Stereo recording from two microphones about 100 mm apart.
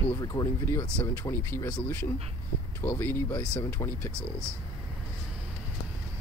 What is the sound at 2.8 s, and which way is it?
Speech, 20° left (ahead or behind).